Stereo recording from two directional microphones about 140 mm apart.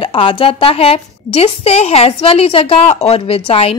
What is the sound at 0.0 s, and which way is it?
A woman's voice, 40° left (ahead or behind).